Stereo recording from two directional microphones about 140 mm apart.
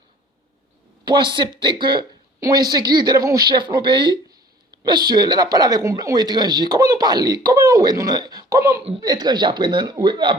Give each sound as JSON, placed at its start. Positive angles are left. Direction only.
{"t": 1.0, "sound": "speech", "side_deg": -35}